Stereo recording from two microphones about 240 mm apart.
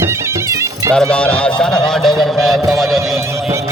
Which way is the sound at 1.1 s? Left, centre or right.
Centre.